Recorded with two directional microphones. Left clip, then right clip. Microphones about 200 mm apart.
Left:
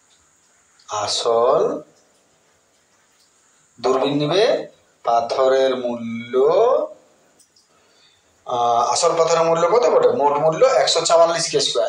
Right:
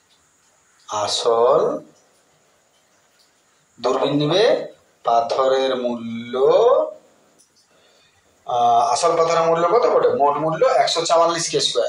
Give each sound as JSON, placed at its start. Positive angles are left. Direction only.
{"t": 0.8, "sound": "speech", "side_deg": 10}
{"t": 3.8, "sound": "speech", "side_deg": 10}
{"t": 8.5, "sound": "a man's voice", "side_deg": 20}